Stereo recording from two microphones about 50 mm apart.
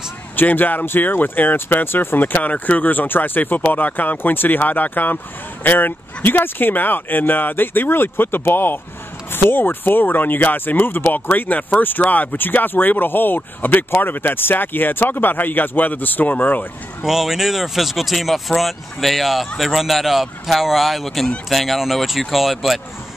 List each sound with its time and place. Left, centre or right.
0.4 s speech: left
17.0 s speech: centre